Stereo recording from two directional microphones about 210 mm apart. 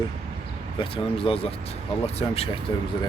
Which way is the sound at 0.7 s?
25° left (ahead or behind).